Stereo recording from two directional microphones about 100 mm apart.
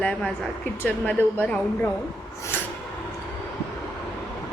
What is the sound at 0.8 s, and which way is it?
A woman's voice, 15° left (ahead or behind).